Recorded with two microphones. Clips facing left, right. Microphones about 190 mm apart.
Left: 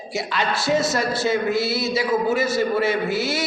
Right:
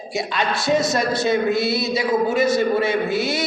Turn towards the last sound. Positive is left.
turn(degrees=-15)  # may be behind; listen again after turning